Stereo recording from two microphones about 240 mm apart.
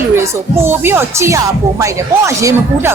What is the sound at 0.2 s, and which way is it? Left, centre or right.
Speech, centre.